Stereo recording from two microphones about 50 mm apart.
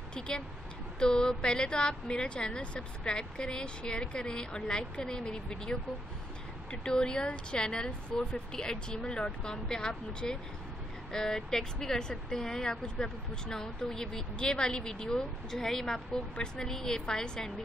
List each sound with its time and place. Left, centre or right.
0.9 s speech: centre